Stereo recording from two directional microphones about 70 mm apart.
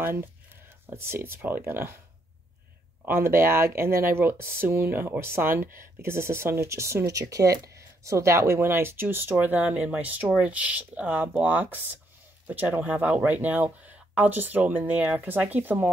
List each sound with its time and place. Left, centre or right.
0.0 s speech: right
3.1 s speech: right